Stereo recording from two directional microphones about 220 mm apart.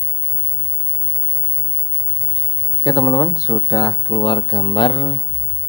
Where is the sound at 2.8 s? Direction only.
15° left (ahead or behind).